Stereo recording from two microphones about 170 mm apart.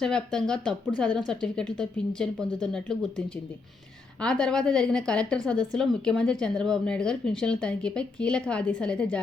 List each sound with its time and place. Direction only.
0.0 s a woman's voice: 5° left (ahead or behind)